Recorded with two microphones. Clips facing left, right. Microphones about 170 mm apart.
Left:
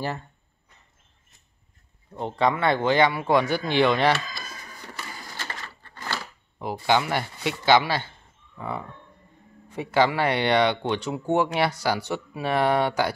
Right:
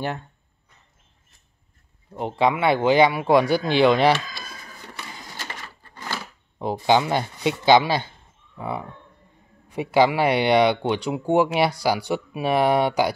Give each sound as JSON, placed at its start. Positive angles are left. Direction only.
{"t": 2.1, "sound": "speech", "side_deg": -10}
{"t": 5.6, "sound": "a sound", "side_deg": -10}
{"t": 8.5, "sound": "speech", "side_deg": -10}